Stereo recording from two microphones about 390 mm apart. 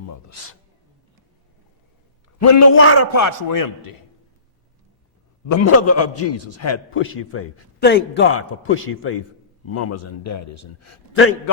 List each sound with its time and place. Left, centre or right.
0.1 s a man's voice: left
2.4 s a man's voice: left
5.5 s a man's voice: left